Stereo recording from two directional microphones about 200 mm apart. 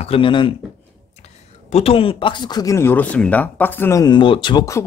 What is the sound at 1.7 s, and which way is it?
Speech, 30° left (ahead or behind).